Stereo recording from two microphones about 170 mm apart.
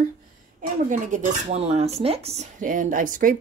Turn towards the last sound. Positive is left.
turn(degrees=-50)  # may be behind; listen again after turning